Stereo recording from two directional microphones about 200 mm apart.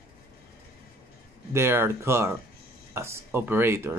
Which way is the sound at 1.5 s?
10° right (ahead or behind).